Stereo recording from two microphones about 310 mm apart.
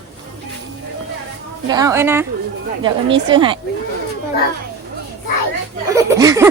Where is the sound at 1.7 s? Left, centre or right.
Centre.